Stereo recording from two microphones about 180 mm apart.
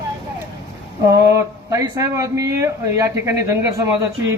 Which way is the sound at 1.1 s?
15° right (ahead or behind).